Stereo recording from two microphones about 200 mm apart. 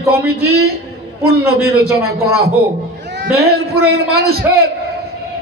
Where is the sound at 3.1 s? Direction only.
55° right (ahead or behind).